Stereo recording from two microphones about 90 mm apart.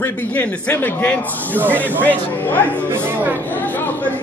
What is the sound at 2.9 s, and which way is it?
Speech, 25° right (ahead or behind).